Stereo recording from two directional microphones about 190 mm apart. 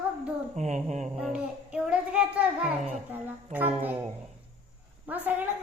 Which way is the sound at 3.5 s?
10° right (ahead or behind).